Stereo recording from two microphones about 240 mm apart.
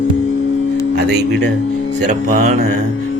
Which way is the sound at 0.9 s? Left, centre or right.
Right.